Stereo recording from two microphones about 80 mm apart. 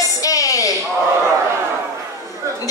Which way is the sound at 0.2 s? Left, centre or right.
Left.